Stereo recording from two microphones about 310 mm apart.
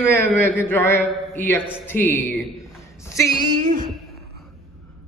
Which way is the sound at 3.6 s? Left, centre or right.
Right.